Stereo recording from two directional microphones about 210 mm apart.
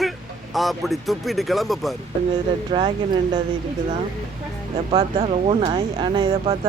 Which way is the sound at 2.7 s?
20° right (ahead or behind).